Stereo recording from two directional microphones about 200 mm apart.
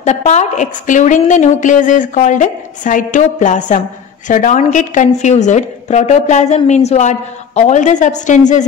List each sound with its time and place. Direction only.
0.0 s a woman's voice: 35° left (ahead or behind)